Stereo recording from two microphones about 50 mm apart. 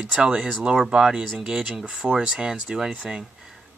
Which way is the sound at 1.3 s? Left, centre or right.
Centre.